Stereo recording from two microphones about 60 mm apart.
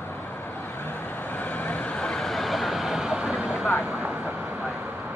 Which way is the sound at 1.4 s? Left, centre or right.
Left.